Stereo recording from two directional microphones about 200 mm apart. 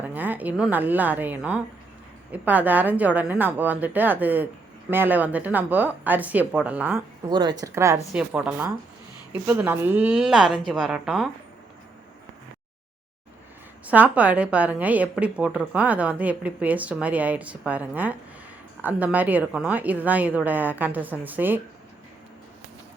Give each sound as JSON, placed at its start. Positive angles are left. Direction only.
{"t": 0.0, "sound": "a woman's voice", "side_deg": -10}
{"t": 7.3, "sound": "a woman's voice", "side_deg": -20}
{"t": 13.8, "sound": "a woman's voice", "side_deg": -10}